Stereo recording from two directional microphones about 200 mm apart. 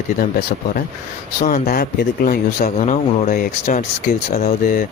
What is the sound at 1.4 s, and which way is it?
Speech, 45° left (ahead or behind).